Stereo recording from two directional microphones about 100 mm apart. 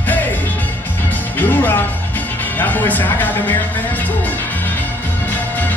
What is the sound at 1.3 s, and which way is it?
Music, 20° left (ahead or behind).